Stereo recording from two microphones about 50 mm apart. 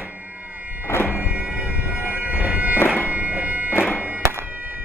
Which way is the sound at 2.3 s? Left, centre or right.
Right.